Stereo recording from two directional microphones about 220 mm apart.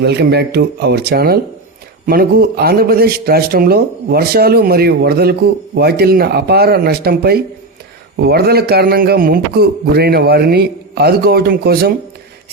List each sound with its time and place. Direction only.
0.0 s a man's voice: 50° right (ahead or behind)